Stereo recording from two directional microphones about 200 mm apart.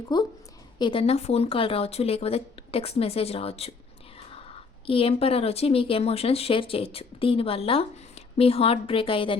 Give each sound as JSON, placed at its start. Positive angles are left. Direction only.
{"t": 0.1, "sound": "speech", "side_deg": 20}
{"t": 4.9, "sound": "speech", "side_deg": 25}